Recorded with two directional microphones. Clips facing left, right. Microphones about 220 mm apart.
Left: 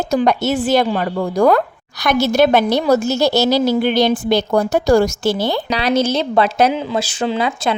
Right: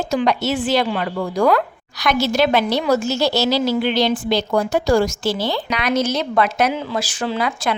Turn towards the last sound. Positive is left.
turn(degrees=25)  # may be behind; listen again after turning